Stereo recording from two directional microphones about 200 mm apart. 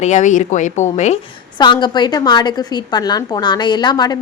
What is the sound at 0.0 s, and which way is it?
Speech, 35° left (ahead or behind).